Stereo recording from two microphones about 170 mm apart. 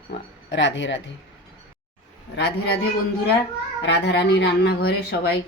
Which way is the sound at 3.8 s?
85° left.